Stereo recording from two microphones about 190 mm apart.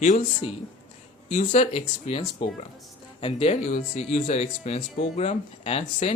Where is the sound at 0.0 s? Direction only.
40° left (ahead or behind).